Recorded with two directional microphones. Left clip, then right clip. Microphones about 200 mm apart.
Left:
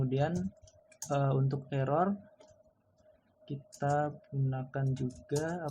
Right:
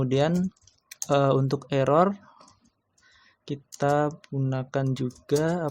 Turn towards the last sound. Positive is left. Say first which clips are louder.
# right 10 dB
turn(degrees=-55)  # may be behind; listen again after turning